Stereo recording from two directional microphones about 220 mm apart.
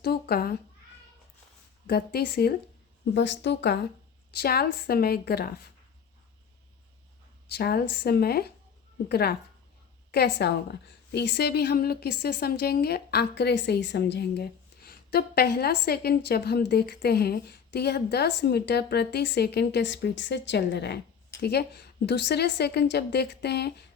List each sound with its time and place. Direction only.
0.0 s a woman's voice: 45° left (ahead or behind)
1.9 s a woman's voice: 45° left (ahead or behind)
7.5 s a woman's voice: 45° left (ahead or behind)